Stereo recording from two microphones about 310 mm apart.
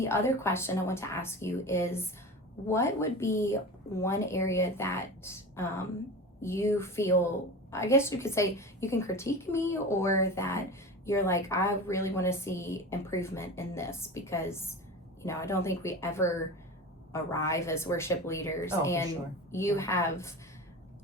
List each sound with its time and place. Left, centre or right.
0.0 s a woman's voice: centre